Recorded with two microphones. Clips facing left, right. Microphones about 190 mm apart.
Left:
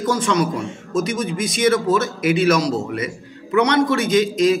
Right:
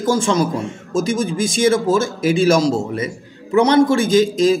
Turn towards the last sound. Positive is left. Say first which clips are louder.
# right 2 dB
turn(degrees=-30)  # may be behind; listen again after turning